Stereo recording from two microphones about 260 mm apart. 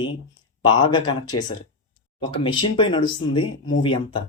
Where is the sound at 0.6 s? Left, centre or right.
Centre.